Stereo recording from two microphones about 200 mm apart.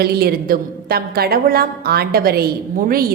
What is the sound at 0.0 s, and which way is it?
A woman's voice, 50° right (ahead or behind).